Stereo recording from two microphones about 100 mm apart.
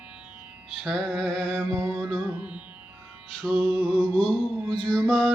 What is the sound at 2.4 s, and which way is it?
Music, 15° right (ahead or behind).